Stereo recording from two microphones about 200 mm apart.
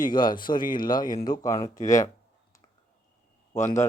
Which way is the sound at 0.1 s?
20° left (ahead or behind).